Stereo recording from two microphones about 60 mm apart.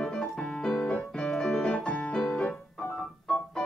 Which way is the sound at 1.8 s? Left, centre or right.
Centre.